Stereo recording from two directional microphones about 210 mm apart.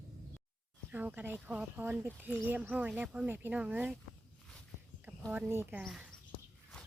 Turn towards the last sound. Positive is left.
turn(degrees=-5)  # may be behind; listen again after turning